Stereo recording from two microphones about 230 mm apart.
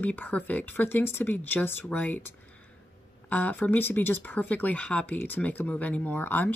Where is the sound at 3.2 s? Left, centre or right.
Centre.